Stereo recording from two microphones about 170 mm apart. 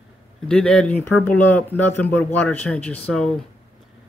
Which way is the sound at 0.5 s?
5° left (ahead or behind).